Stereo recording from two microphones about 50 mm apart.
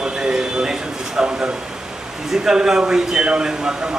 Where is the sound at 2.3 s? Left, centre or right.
Centre.